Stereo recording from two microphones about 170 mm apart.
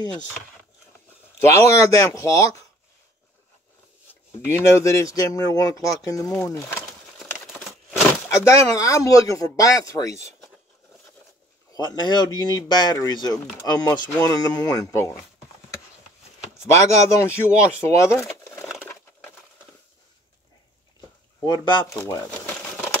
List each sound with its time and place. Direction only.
1.5 s speech: 15° left (ahead or behind)
4.5 s speech: 15° left (ahead or behind)
11.7 s speech: 25° left (ahead or behind)
16.5 s speech: 15° left (ahead or behind)
21.6 s speech: 25° left (ahead or behind)
22.5 s a sound: 10° left (ahead or behind)